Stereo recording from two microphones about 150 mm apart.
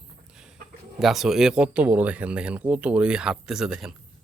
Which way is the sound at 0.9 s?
Centre (ahead or behind).